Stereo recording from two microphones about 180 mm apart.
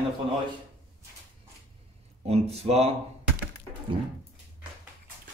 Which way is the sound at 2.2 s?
35° right (ahead or behind).